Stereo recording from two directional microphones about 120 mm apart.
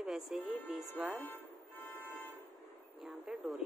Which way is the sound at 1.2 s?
15° left (ahead or behind).